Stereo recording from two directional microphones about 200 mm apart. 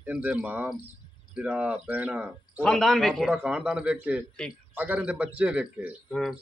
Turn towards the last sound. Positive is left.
turn(degrees=0)  # may be behind; listen again after turning